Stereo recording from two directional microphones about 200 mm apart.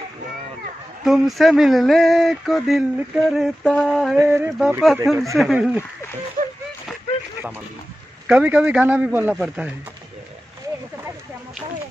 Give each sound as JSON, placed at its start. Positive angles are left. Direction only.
{"t": 1.0, "sound": "a man's voice", "side_deg": 0}
{"t": 8.3, "sound": "a man's voice", "side_deg": -5}